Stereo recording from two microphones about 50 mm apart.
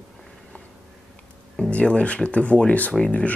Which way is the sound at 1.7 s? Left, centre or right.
Left.